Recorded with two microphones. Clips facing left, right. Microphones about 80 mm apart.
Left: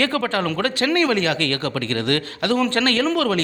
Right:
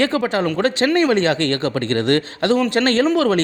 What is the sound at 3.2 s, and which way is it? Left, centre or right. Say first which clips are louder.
Speech: right 4 dB; right.